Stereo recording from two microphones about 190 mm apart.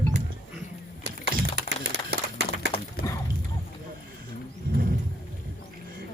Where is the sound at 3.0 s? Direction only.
15° left (ahead or behind).